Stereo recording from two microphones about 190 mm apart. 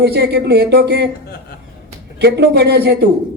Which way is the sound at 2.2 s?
60° right (ahead or behind).